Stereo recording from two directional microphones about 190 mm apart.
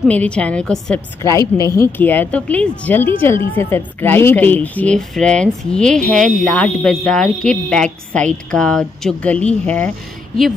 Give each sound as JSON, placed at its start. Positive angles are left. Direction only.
{"t": 0.1, "sound": "speech", "side_deg": 5}
{"t": 1.2, "sound": "speech", "side_deg": 15}